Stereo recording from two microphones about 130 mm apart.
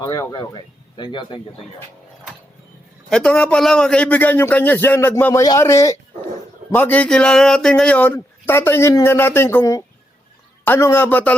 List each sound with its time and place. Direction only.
0.0 s speech: 30° left (ahead or behind)
3.1 s a man's voice: 5° left (ahead or behind); by 6.0 s 25° left (ahead or behind)
6.7 s a man's voice: 15° left (ahead or behind)